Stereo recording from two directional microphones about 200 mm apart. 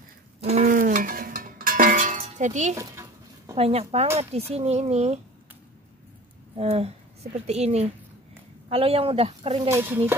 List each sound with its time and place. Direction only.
0.4 s cowbell: 30° right (ahead or behind)
2.7 s a sound: 15° right (ahead or behind)
3.5 s speech: 30° right (ahead or behind)
6.5 s speech: 30° right (ahead or behind)
9.7 s speech: 10° right (ahead or behind)